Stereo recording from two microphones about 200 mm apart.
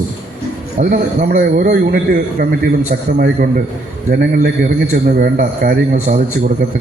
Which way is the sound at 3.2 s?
45° right (ahead or behind).